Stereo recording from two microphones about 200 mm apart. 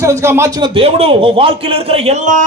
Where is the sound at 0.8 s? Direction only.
30° right (ahead or behind).